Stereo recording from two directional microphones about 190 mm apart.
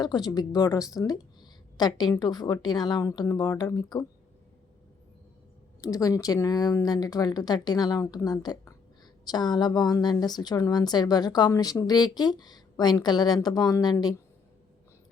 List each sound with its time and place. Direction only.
0.0 s a woman's voice: 20° left (ahead or behind)
5.8 s a woman's voice: 20° left (ahead or behind)